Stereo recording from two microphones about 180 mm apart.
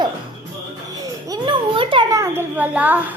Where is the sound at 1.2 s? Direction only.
25° right (ahead or behind).